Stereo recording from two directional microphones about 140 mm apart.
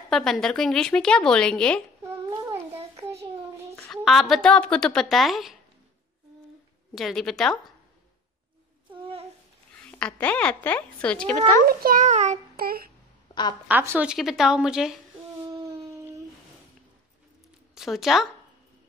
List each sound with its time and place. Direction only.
0.1 s speech: 5° left (ahead or behind)
3.0 s child singing: 20° right (ahead or behind)
3.9 s speech: centre (ahead or behind)
7.0 s speech: centre (ahead or behind)
9.0 s humming: 45° right (ahead or behind)
9.8 s a woman's voice: 5° left (ahead or behind)
11.6 s a child's voice: 85° right; by 12.4 s 55° right (ahead or behind)
12.5 s speech: 90° right
13.3 s a woman's voice: 30° left (ahead or behind)
13.7 s a woman's voice: 15° right (ahead or behind)
14.1 s speech: centre (ahead or behind)
17.7 s speech: centre (ahead or behind)